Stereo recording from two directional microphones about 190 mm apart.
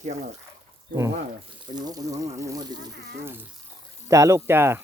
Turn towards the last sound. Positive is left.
turn(degrees=-10)  # may be behind; listen again after turning